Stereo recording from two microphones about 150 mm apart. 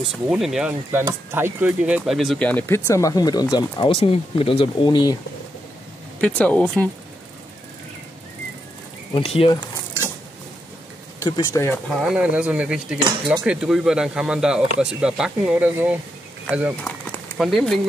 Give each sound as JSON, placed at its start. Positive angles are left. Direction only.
{"t": 0.1, "sound": "speech", "side_deg": -5}
{"t": 0.9, "sound": "speech", "side_deg": -15}
{"t": 6.2, "sound": "speech", "side_deg": 10}
{"t": 9.1, "sound": "speech", "side_deg": 40}
{"t": 11.1, "sound": "speech", "side_deg": 25}
{"t": 12.0, "sound": "speech", "side_deg": -5}